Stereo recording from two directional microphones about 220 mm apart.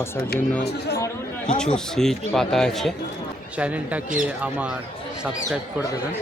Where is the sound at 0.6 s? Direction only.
45° left (ahead or behind).